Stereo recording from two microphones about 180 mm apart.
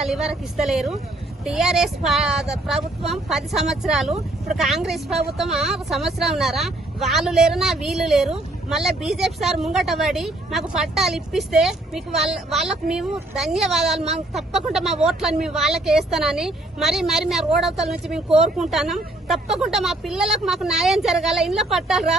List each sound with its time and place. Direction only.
0.0 s a woman's voice: centre (ahead or behind)